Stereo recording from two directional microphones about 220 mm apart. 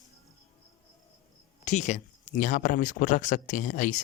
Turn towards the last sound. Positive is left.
turn(degrees=35)  # may be behind; listen again after turning